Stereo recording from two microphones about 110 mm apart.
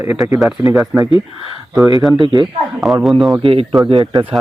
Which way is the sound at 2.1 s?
50° right (ahead or behind).